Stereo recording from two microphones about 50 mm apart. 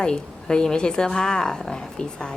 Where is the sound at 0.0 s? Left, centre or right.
Centre.